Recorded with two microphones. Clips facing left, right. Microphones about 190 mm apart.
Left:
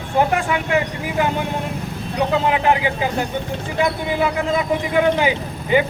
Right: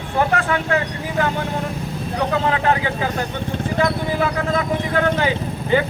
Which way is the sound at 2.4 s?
15° left (ahead or behind).